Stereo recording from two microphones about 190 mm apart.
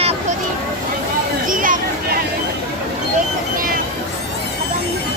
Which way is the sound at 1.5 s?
45° right (ahead or behind).